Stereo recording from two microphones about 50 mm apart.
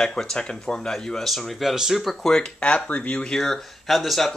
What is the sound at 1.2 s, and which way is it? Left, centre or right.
Speech, centre.